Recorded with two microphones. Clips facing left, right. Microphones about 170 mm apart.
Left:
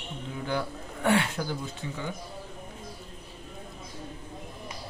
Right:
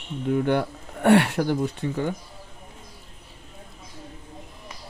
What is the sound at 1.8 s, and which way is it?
Speech, 55° right (ahead or behind).